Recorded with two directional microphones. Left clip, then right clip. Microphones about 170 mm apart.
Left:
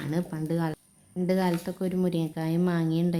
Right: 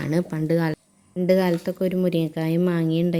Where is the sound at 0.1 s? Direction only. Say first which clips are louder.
Right 8 dB; 35° right (ahead or behind).